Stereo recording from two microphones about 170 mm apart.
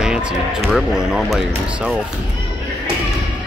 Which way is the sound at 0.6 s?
Centre (ahead or behind).